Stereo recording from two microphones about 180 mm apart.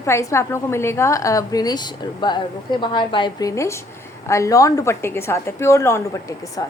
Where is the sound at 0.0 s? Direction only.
15° left (ahead or behind).